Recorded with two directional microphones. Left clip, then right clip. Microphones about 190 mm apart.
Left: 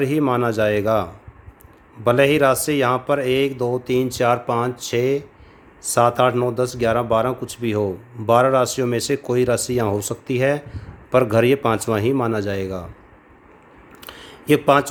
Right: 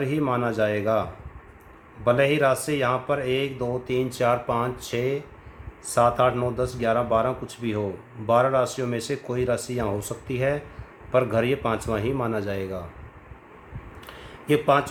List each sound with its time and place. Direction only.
0.0 s speech: 55° left (ahead or behind)
2.0 s speech: 60° left (ahead or behind)
14.0 s a sound: 55° left (ahead or behind)